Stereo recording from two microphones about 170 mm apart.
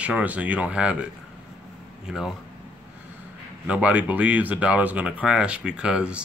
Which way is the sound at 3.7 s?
5° right (ahead or behind).